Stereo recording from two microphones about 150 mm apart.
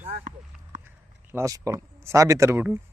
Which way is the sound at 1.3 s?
20° right (ahead or behind).